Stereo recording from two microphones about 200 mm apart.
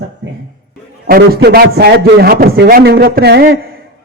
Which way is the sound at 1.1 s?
50° right (ahead or behind).